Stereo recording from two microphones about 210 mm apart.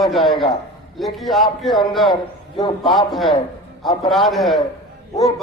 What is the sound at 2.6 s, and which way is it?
Speech, 25° left (ahead or behind).